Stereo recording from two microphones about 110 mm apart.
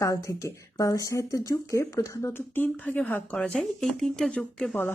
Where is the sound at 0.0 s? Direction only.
30° left (ahead or behind).